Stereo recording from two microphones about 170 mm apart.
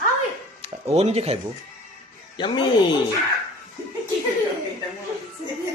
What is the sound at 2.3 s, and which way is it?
Speech, 30° left (ahead or behind).